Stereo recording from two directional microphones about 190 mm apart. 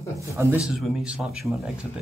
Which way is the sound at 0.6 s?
Centre (ahead or behind).